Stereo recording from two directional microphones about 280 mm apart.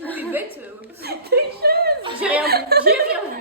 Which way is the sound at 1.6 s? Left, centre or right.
Right.